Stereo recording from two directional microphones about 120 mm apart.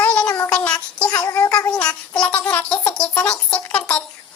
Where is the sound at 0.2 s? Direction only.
10° left (ahead or behind).